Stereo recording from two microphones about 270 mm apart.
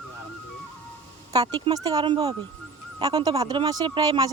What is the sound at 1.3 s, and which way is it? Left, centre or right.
Speech, centre.